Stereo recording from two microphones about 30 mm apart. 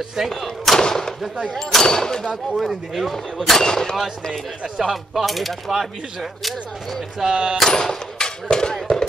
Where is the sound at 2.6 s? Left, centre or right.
Centre.